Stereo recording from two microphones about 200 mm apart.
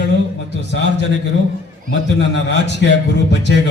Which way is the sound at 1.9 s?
65° left (ahead or behind).